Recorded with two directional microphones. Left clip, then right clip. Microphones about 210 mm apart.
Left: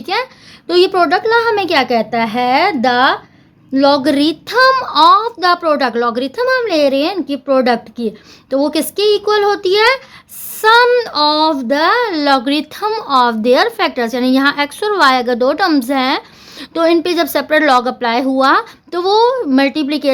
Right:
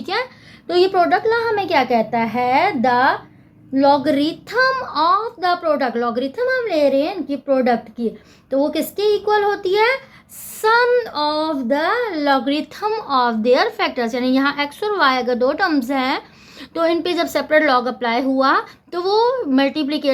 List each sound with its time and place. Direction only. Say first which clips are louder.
0.0 s a child's voice: left 4 dB; 15° left (ahead or behind)
0.7 s a woman's voice: left 4 dB; 30° left (ahead or behind)